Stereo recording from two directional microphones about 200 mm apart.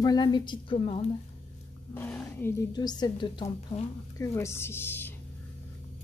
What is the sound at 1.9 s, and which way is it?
A woman's voice, 10° left (ahead or behind).